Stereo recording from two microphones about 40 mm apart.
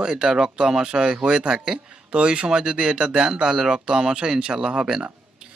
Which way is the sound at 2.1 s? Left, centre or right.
Right.